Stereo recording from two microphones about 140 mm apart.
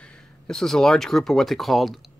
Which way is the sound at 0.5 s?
5° left (ahead or behind).